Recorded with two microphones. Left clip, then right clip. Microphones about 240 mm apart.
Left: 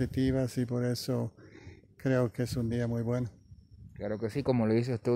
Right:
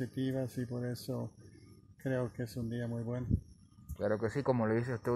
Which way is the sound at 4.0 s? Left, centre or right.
Centre.